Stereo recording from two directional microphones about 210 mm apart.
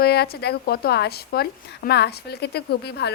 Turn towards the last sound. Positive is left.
turn(degrees=50)  # may be behind; listen again after turning